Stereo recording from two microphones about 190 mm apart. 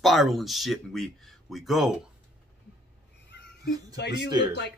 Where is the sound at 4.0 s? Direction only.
60° left (ahead or behind).